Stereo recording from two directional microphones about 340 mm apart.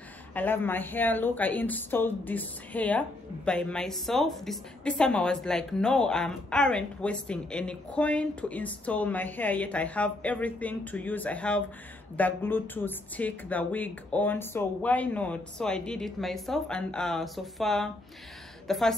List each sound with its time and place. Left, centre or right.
0.3 s a woman's voice: centre